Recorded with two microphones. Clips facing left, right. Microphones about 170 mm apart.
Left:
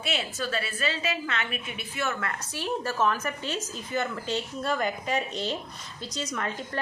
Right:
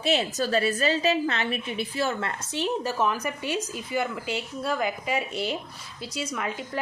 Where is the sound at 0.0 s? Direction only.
40° right (ahead or behind).